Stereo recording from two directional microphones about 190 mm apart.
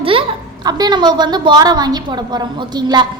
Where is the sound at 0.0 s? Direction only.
30° right (ahead or behind).